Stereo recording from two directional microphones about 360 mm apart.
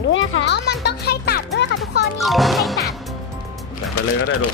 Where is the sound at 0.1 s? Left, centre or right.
Left.